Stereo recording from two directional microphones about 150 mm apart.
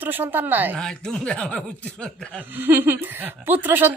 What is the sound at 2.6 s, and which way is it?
A woman's voice, 15° right (ahead or behind).